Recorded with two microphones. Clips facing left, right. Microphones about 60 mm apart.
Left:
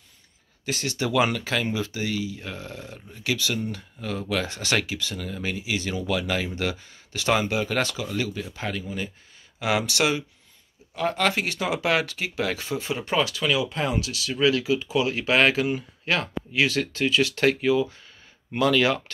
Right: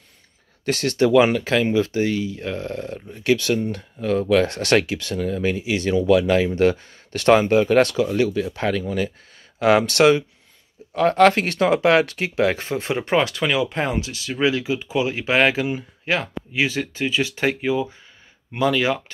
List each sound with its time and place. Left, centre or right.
0.7 s speech: right
9.6 s speech: right; by 19.0 s centre